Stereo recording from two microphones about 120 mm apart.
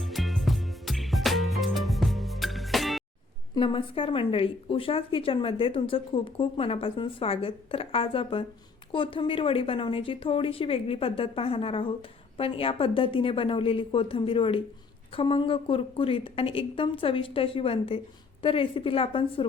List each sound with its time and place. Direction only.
0.0 s music: centre (ahead or behind)
3.6 s speech: 45° left (ahead or behind)